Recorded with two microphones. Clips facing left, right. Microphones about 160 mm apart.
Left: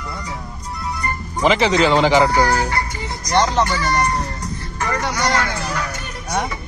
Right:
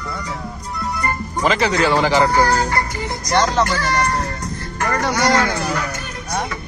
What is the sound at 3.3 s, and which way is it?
Speech, 15° left (ahead or behind).